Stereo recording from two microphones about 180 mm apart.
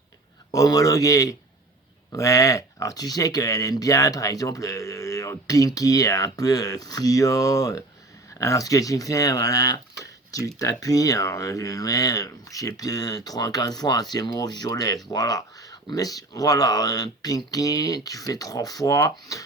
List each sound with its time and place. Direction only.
0.5 s speech: 20° left (ahead or behind)